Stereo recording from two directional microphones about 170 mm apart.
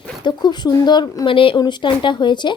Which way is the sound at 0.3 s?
25° left (ahead or behind).